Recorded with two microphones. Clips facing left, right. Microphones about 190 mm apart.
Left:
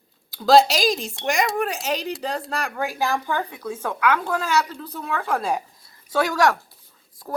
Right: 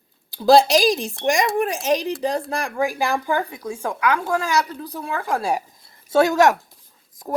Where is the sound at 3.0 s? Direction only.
15° right (ahead or behind).